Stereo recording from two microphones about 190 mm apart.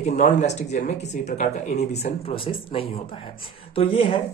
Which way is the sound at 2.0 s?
30° left (ahead or behind).